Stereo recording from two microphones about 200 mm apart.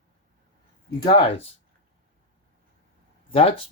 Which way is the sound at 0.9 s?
25° left (ahead or behind).